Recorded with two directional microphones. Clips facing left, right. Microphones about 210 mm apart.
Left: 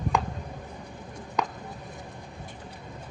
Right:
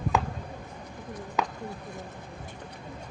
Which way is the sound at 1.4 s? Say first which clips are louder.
Even; 5° right (ahead or behind).